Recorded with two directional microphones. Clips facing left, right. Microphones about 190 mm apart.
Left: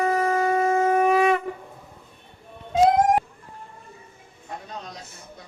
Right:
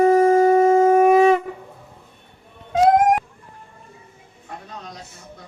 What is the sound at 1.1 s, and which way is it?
Shofar, 25° right (ahead or behind).